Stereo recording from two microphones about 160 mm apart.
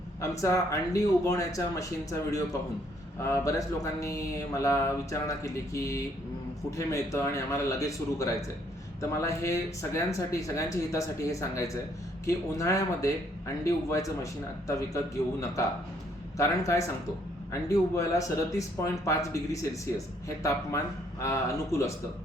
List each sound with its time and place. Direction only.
0.2 s speech: 20° left (ahead or behind)
5.4 s a sound: 20° left (ahead or behind)
6.7 s speech: 20° left (ahead or behind)